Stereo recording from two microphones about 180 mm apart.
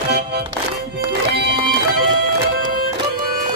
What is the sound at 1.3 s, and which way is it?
Music, 65° right (ahead or behind).